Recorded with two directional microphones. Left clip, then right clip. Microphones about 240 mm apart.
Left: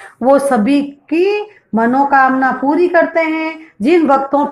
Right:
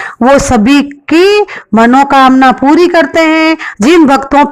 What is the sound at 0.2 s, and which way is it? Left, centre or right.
A woman's voice, right.